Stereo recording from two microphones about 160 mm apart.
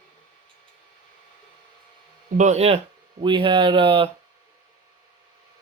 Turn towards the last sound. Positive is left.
turn(degrees=-35)  # may be behind; listen again after turning